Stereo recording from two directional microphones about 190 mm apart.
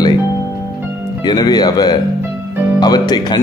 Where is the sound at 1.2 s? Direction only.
20° left (ahead or behind).